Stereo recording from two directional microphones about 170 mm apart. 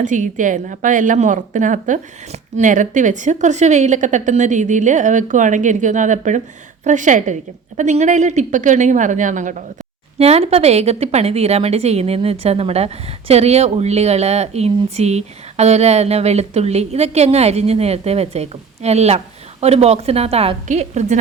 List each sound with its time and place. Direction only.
0.0 s a woman's voice: 50° right (ahead or behind)
10.2 s a woman's voice: 35° right (ahead or behind)